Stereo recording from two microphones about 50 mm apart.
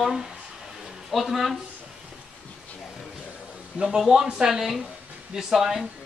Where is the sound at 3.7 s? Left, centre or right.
Centre.